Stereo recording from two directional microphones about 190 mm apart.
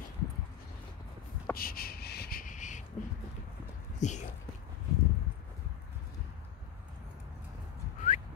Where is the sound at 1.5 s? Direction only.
50° left (ahead or behind).